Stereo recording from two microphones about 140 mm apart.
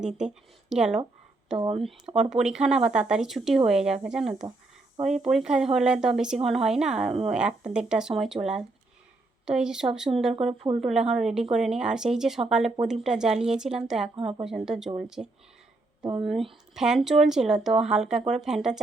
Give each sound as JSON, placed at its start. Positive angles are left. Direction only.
{"t": 0.2, "sound": "speech", "side_deg": -5}
{"t": 1.5, "sound": "speech", "side_deg": -40}
{"t": 2.3, "sound": "speech", "side_deg": -5}
{"t": 8.4, "sound": "speech", "side_deg": -40}
{"t": 9.5, "sound": "speech", "side_deg": -5}
{"t": 10.3, "sound": "speech", "side_deg": -40}
{"t": 10.8, "sound": "speech", "side_deg": -5}